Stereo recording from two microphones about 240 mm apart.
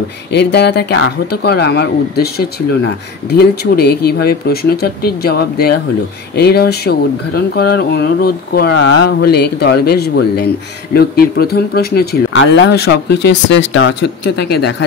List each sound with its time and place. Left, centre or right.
0.3 s speech: left